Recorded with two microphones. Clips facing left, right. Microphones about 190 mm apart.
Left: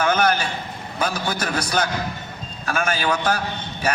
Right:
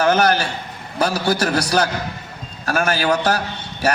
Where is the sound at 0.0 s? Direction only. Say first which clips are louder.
Right 3 dB; 40° right (ahead or behind).